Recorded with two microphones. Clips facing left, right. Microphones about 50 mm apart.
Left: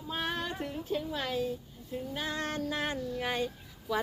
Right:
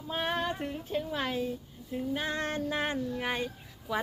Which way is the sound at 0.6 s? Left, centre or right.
Right.